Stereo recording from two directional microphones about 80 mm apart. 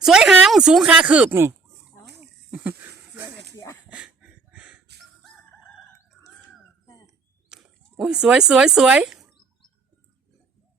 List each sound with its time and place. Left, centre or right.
0.0 s speech: centre
1.3 s speech: right
3.5 s dog: left
3.8 s a sound: centre
7.5 s speech: centre